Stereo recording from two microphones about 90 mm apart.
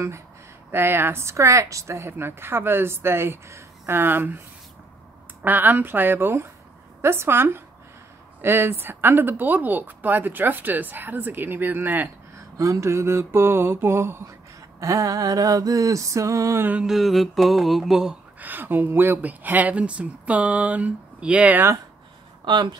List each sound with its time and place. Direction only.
0.7 s speech: 25° right (ahead or behind)
5.4 s speech: 20° right (ahead or behind)
12.4 s speech: 40° right (ahead or behind)
14.8 s music: 35° right (ahead or behind)
16.8 s mantra: centre (ahead or behind)
18.4 s speech: 20° right (ahead or behind)
22.4 s speech: 55° right (ahead or behind)